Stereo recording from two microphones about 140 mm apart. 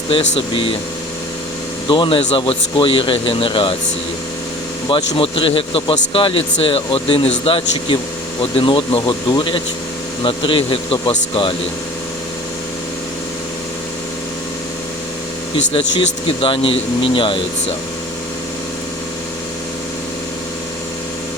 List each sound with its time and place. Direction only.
0.1 s speech: 40° left (ahead or behind)
1.9 s speech: 40° left (ahead or behind)
4.9 s speech: 40° left (ahead or behind)
15.7 s speech: 40° left (ahead or behind)